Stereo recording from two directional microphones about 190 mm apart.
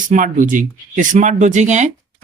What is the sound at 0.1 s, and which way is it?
Speech, 45° right (ahead or behind).